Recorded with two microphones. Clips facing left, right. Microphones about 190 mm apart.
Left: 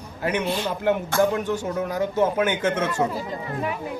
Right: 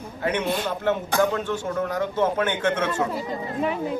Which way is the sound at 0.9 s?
10° left (ahead or behind).